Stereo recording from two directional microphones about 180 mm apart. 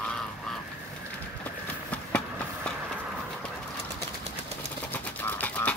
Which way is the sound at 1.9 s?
5° left (ahead or behind).